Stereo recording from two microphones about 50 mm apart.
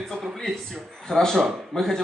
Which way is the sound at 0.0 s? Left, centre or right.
Centre.